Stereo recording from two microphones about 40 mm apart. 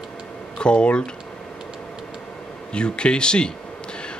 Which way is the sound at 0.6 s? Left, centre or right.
Left.